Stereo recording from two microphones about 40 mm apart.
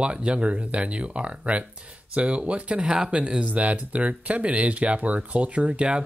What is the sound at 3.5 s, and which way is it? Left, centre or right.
Speech, right.